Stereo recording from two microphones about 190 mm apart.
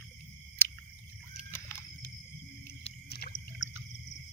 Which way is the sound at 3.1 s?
55° left (ahead or behind).